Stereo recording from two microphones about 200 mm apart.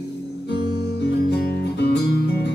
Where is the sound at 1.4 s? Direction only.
55° left (ahead or behind).